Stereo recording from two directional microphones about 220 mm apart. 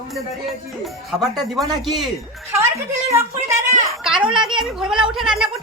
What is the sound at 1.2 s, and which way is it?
Speech, centre (ahead or behind).